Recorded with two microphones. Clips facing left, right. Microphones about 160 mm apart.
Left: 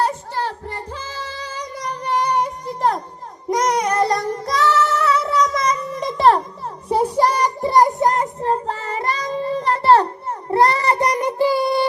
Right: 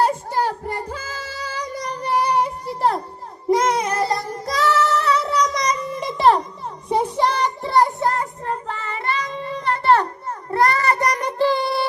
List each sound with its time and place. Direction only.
0.0 s music: 10° right (ahead or behind)
2.0 s a sound: 10° right (ahead or behind)
3.7 s child singing: 5° right (ahead or behind)
4.7 s music: centre (ahead or behind)
5.9 s a sound: 5° right (ahead or behind)
6.8 s child singing: 10° left (ahead or behind)